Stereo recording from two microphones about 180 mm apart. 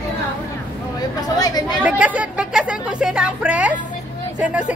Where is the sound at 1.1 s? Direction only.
20° left (ahead or behind).